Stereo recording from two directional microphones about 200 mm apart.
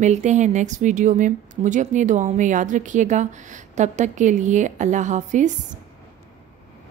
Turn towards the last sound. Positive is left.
turn(degrees=-35)  # may be behind; listen again after turning